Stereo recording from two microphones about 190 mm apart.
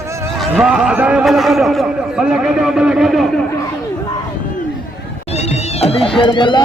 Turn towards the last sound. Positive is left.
turn(degrees=25)  # may be behind; listen again after turning